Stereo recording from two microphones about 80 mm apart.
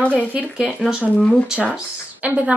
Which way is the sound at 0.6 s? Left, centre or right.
Centre.